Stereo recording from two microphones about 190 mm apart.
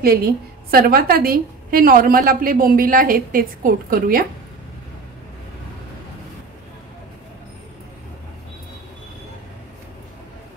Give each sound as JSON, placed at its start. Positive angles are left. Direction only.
{"t": 0.0, "sound": "a woman's voice", "side_deg": -50}